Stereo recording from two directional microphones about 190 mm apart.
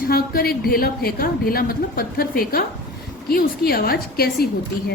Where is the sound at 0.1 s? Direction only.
50° left (ahead or behind).